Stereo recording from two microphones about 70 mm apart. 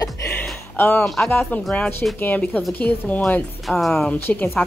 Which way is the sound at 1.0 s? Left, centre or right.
Centre.